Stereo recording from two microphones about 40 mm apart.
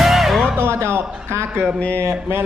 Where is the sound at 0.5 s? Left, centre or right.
Right.